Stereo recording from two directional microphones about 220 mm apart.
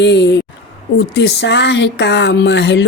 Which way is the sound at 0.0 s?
50° left (ahead or behind).